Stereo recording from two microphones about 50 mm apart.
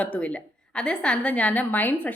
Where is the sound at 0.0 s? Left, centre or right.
Left.